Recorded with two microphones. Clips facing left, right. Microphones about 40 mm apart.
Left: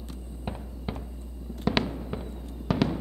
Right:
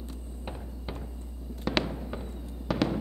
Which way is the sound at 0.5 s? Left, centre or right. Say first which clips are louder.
Left 4 dB; centre.